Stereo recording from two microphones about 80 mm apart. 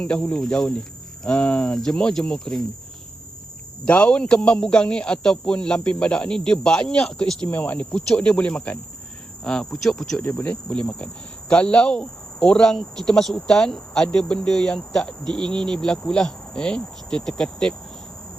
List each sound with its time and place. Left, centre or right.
0.0 s cricket: centre
3.8 s cricket: centre
7.4 s cricket: centre
10.2 s cricket: left